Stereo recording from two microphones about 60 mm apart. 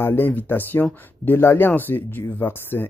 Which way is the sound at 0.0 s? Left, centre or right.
Left.